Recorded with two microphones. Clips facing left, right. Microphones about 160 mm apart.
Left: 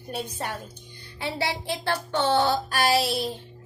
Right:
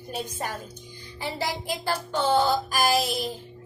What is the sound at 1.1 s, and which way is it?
Music, 70° left (ahead or behind).